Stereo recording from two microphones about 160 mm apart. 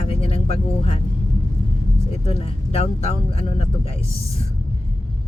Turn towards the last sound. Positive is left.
turn(degrees=40)  # may be behind; listen again after turning